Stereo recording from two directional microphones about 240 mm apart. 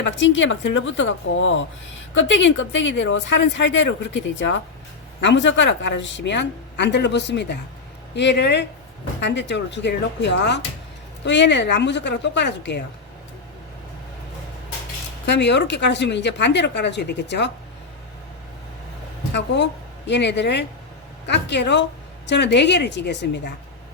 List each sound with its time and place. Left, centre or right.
0.0 s speech: left
15.3 s speech: left
20.1 s speech: left